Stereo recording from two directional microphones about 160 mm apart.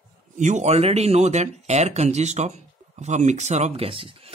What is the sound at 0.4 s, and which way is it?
Speech, 50° right (ahead or behind).